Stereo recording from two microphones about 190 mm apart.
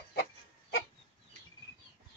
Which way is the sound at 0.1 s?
55° left (ahead or behind).